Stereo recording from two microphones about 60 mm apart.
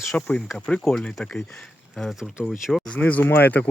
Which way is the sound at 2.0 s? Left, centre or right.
Centre.